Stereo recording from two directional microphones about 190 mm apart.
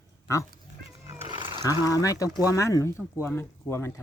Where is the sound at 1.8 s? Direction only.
15° left (ahead or behind).